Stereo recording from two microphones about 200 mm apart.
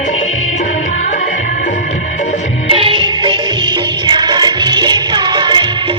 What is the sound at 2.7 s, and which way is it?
Music, 25° right (ahead or behind).